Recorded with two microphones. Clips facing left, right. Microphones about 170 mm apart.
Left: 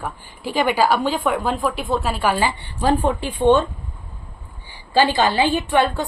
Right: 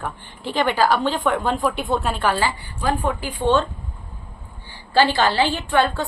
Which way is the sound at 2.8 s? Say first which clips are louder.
Left 4 dB; 30° left (ahead or behind).